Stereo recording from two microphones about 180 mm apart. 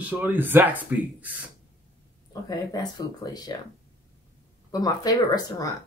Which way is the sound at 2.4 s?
20° left (ahead or behind).